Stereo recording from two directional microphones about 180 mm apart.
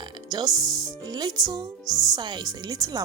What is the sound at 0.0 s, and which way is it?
Speech, 20° right (ahead or behind).